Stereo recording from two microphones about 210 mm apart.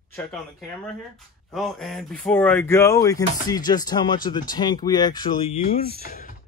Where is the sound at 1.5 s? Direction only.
Centre (ahead or behind).